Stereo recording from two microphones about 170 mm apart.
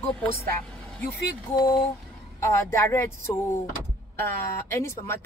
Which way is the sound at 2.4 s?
15° left (ahead or behind).